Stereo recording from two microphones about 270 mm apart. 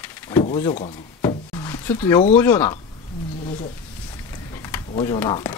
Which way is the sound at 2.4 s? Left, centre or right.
Centre.